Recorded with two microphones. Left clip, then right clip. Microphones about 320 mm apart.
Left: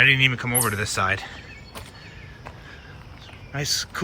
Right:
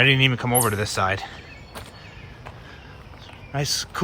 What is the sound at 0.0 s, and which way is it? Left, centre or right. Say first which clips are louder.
Speech: left 1 dB; centre.